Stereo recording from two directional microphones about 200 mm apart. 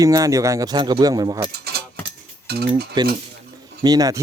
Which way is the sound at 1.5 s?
50° right (ahead or behind).